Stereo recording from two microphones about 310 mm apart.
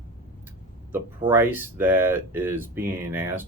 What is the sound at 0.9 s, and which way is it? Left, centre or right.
Speech, centre.